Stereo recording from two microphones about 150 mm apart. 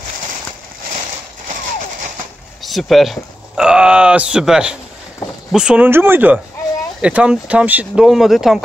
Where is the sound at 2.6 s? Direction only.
Centre (ahead or behind).